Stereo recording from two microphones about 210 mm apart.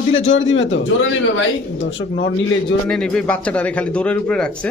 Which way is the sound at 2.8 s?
5° left (ahead or behind).